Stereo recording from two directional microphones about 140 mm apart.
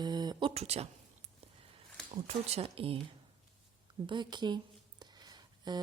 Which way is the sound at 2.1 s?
40° right (ahead or behind).